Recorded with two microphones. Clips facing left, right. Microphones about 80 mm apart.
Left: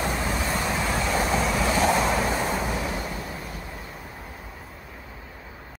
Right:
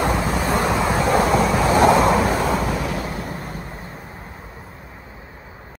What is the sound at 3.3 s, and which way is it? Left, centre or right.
Vehicle, right.